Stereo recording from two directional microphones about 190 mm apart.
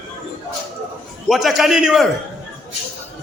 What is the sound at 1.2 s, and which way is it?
Speech, centre (ahead or behind).